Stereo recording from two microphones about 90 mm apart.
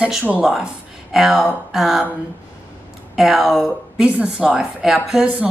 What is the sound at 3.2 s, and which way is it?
A woman's voice, 5° right (ahead or behind).